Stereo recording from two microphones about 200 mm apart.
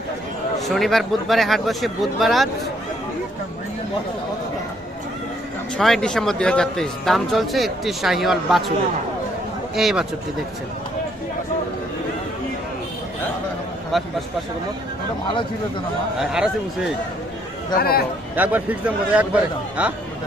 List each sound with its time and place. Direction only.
0.7 s speech: centre (ahead or behind)
5.7 s speech: centre (ahead or behind)
9.7 s speech: 5° right (ahead or behind)
13.9 s speech: centre (ahead or behind)
17.7 s speech: 50° left (ahead or behind)
18.3 s a man's voice: 10° right (ahead or behind)